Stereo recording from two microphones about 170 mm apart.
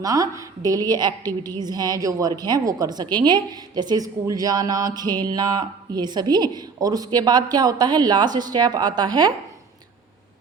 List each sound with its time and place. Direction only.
0.0 s a woman's voice: 20° right (ahead or behind)